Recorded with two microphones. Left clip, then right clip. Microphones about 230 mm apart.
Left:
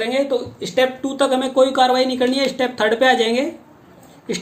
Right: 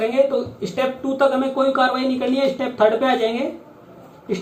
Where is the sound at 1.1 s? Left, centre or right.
Left.